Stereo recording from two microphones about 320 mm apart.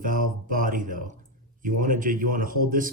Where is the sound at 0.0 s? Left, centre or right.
Right.